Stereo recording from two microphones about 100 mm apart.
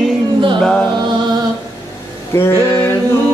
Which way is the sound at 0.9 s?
45° right (ahead or behind).